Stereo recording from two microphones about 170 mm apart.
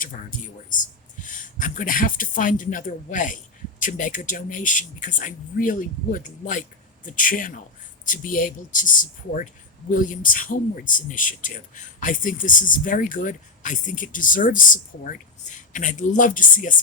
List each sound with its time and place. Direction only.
0.0 s speech: 50° left (ahead or behind)